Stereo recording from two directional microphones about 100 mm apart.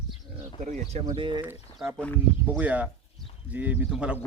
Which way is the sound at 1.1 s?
55° right (ahead or behind).